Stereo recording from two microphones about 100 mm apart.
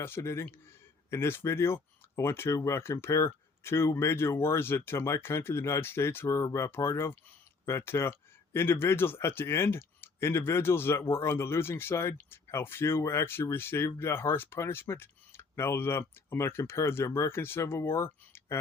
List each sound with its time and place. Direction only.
0.0 s speech: 25° left (ahead or behind)